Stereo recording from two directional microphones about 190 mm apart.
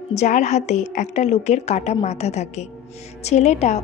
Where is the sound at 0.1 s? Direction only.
35° left (ahead or behind).